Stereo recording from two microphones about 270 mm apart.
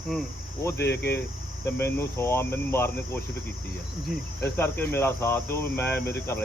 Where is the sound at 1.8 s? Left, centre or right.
Centre.